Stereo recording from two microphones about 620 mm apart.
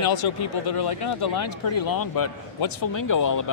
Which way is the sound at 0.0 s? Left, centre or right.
Left.